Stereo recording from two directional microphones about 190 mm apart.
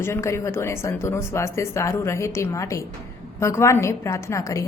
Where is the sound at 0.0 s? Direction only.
15° left (ahead or behind).